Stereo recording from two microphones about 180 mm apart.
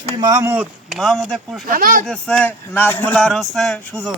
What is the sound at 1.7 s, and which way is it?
Speech, 50° right (ahead or behind).